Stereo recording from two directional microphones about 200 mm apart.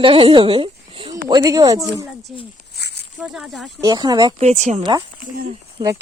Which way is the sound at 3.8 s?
20° right (ahead or behind).